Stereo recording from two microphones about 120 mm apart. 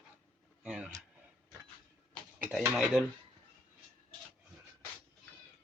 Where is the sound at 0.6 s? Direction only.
10° right (ahead or behind).